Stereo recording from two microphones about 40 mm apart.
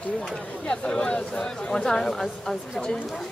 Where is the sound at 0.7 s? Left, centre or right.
Left.